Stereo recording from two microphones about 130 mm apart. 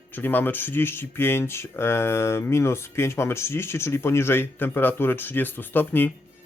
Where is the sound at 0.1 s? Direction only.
15° left (ahead or behind).